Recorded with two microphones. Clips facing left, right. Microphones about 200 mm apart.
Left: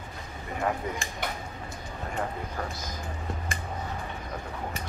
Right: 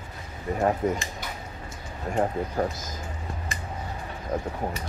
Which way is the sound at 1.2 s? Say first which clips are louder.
Left 4 dB; 60° left (ahead or behind).